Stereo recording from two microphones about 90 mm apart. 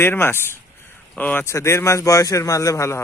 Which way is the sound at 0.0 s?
25° left (ahead or behind).